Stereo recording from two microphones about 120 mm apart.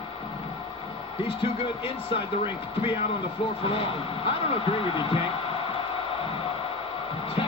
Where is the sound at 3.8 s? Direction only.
50° left (ahead or behind).